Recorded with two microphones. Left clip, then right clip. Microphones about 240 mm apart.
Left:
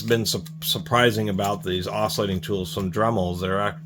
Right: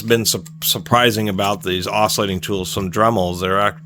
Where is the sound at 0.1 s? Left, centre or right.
Right.